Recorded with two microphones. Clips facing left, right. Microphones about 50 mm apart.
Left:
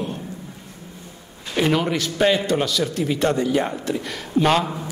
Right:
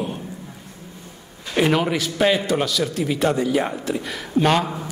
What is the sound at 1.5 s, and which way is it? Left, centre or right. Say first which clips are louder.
A man's voice: right 1 dB; centre.